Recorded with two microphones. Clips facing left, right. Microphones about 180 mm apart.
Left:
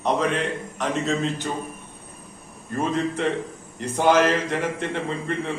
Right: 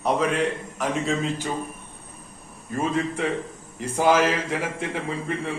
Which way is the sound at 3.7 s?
5° right (ahead or behind).